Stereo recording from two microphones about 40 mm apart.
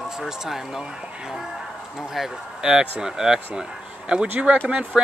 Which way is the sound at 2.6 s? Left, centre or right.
Right.